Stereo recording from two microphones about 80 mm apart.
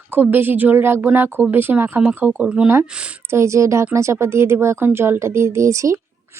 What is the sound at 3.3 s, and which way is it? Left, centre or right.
Speech, right.